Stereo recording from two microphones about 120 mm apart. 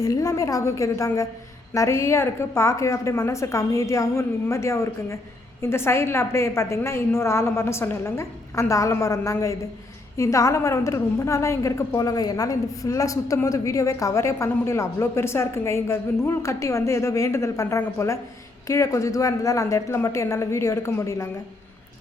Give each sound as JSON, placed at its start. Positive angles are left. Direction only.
{"t": 0.0, "sound": "a woman's voice", "side_deg": 30}